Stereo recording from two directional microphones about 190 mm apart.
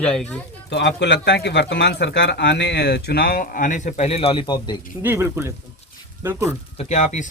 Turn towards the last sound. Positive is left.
turn(degrees=40)  # may be behind; listen again after turning